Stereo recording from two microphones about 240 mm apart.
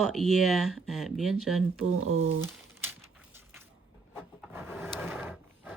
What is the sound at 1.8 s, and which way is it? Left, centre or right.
Speech, right.